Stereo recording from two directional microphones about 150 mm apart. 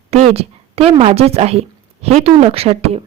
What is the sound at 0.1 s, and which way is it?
A woman's voice, 40° right (ahead or behind).